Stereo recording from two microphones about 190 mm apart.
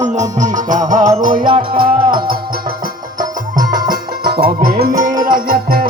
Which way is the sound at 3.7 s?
50° right (ahead or behind).